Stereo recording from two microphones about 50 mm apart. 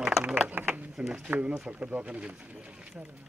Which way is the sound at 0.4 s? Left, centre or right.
Right.